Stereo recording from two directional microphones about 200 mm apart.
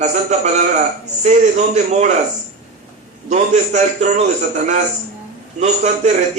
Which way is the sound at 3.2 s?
35° right (ahead or behind).